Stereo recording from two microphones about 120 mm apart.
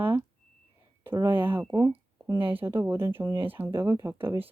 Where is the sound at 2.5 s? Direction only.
20° right (ahead or behind).